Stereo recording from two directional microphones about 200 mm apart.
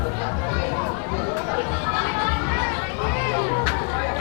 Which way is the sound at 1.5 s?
15° left (ahead or behind).